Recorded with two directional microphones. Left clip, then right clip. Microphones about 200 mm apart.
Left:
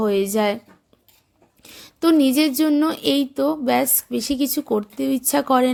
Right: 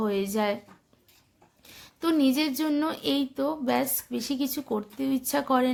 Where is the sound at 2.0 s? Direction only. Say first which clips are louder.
Left 8 dB; 35° left (ahead or behind).